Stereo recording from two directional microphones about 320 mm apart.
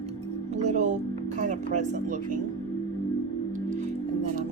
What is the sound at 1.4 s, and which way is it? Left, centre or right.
Speech, right.